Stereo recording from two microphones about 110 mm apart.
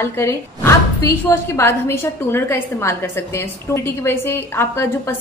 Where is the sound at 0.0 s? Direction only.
25° left (ahead or behind).